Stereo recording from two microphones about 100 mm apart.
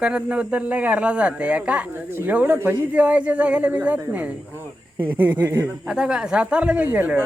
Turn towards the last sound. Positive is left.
turn(degrees=-15)  # may be behind; listen again after turning